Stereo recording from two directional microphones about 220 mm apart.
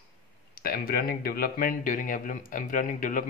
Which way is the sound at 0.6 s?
45° left (ahead or behind).